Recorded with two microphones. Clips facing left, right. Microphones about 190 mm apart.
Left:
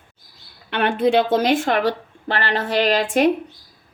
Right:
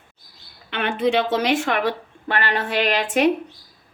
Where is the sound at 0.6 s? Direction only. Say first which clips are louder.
Left 5 dB; 55° left (ahead or behind).